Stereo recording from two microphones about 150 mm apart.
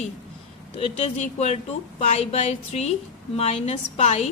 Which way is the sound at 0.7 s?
45° left (ahead or behind).